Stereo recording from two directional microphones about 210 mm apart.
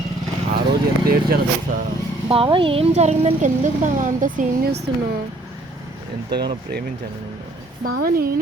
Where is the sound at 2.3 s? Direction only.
25° right (ahead or behind); by 4.8 s 45° right (ahead or behind).